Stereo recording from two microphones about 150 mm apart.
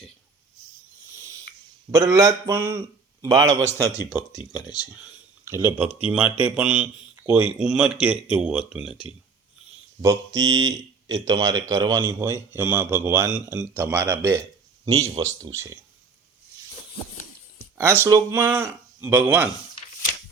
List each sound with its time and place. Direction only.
1.9 s speech: 20° right (ahead or behind)
5.5 s speech: 15° right (ahead or behind)
10.0 s speech: 20° right (ahead or behind)
12.2 s speech: 15° right (ahead or behind)
17.7 s speech: 15° right (ahead or behind)